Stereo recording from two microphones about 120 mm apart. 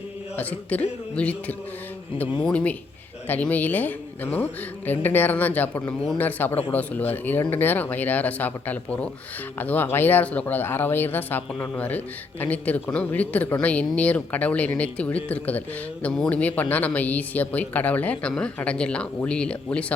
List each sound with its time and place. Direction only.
0.3 s a man's voice: 10° left (ahead or behind)